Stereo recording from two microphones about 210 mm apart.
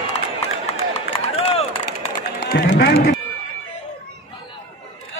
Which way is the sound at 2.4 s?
50° left (ahead or behind).